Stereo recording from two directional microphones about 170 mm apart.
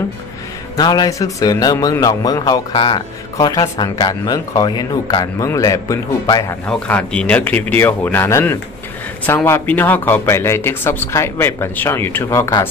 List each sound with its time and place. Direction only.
0.7 s speech: 25° left (ahead or behind)
6.6 s speech: 5° left (ahead or behind)